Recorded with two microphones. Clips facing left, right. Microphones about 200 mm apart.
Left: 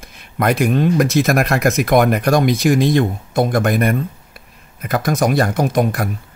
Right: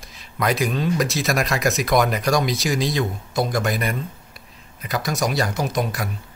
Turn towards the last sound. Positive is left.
turn(degrees=55)  # may be behind; listen again after turning